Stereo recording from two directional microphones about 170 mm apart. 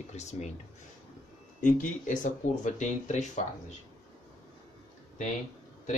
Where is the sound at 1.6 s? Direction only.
50° left (ahead or behind).